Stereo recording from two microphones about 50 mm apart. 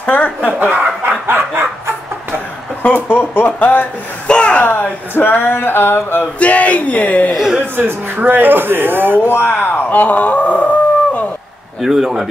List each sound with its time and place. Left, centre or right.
0.0 s speech: left
1.0 s snicker: right
2.8 s speech: left
3.5 s speech: left
4.3 s speech: left
4.6 s a sound: left
6.4 s speech: left
7.7 s speech: right
9.2 s a sound: left
9.5 s a sound: left
11.8 s speech: centre